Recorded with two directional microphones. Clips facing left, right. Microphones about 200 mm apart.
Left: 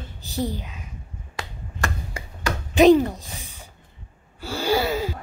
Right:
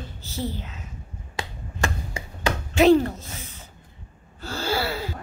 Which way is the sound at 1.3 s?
25° right (ahead or behind).